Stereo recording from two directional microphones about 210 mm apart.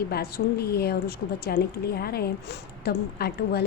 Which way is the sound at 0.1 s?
50° left (ahead or behind).